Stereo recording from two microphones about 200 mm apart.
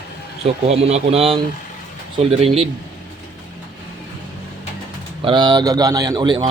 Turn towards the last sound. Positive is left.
turn(degrees=-25)  # may be behind; listen again after turning